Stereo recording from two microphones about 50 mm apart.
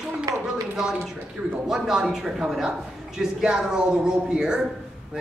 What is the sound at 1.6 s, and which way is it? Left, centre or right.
A woman's voice, centre.